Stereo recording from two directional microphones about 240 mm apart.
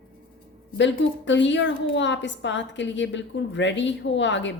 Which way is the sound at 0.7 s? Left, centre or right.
Left.